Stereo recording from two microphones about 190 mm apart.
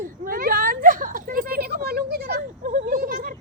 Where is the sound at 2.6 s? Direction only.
45° right (ahead or behind).